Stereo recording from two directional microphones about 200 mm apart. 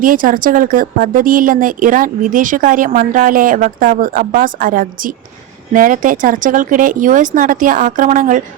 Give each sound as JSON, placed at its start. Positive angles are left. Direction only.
{"t": 0.0, "sound": "a woman's voice", "side_deg": -45}